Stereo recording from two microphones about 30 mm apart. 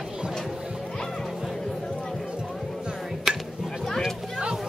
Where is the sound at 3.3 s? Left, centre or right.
Centre.